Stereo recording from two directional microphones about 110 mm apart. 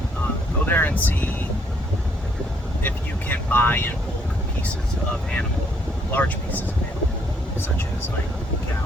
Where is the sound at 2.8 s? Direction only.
15° left (ahead or behind).